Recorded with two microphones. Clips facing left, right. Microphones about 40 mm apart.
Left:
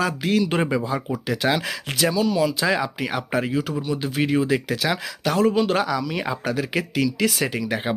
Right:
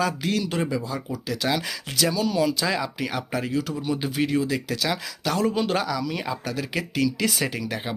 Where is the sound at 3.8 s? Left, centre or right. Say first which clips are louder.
Left 1 dB; centre.